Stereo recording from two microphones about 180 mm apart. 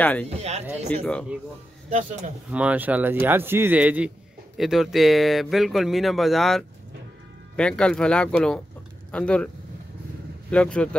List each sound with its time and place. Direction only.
0.0 s a man's voice: 10° left (ahead or behind)
0.4 s speech: 35° right (ahead or behind)
0.8 s a man's voice: 5° left (ahead or behind)
1.9 s speech: 40° right (ahead or behind)
2.5 s speech: 10° right (ahead or behind)
10.5 s speech: 5° left (ahead or behind)